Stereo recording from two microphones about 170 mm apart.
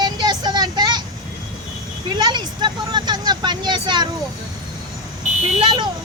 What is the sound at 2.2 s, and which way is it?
Speech, 25° right (ahead or behind).